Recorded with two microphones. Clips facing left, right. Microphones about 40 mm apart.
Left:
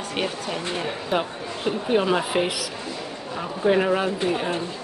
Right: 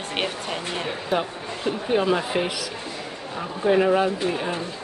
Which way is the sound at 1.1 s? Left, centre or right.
Centre.